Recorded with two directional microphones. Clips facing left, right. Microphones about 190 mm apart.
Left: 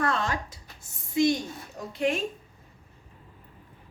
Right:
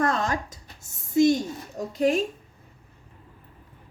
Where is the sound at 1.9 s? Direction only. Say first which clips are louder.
Right 5 dB; 40° right (ahead or behind).